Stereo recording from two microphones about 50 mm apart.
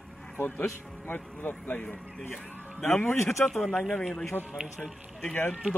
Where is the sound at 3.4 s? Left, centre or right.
Centre.